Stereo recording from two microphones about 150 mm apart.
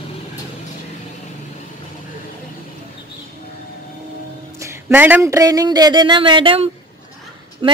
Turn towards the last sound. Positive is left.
turn(degrees=-35)  # may be behind; listen again after turning